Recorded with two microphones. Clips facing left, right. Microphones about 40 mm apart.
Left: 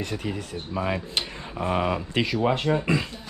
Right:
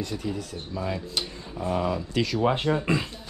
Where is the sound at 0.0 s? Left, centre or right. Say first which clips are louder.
Left 1 dB; left.